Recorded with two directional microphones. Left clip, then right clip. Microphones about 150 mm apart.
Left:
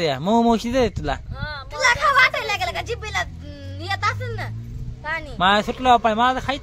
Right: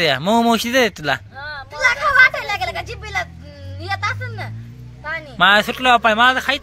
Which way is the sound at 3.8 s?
40° left (ahead or behind).